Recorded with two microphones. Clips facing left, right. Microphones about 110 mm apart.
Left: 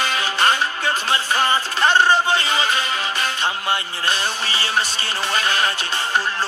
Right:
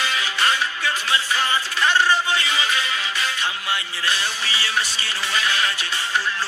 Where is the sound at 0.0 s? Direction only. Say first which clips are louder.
Left 3 dB; 45° left (ahead or behind).